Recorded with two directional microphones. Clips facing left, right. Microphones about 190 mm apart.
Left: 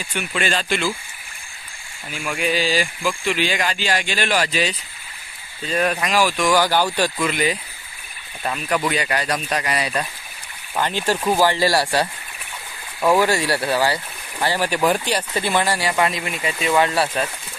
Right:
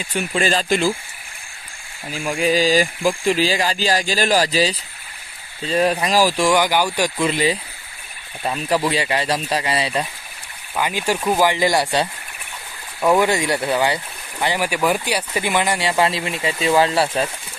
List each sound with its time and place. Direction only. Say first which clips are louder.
0.1 s speech: right 4 dB; 35° right (ahead or behind)
2.1 s speech: right 4 dB; 35° right (ahead or behind)
6.6 s speech: even; 15° right (ahead or behind)
7.2 s speech: right 2 dB; 30° right (ahead or behind)
10.8 s speech: even; 10° right (ahead or behind)
13.2 s speech: right 1 dB; 20° right (ahead or behind)